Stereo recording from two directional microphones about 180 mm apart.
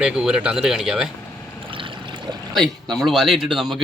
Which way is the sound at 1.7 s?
30° right (ahead or behind).